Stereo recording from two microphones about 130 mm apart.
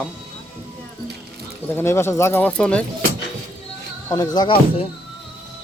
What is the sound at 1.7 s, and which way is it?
Speech, 20° left (ahead or behind).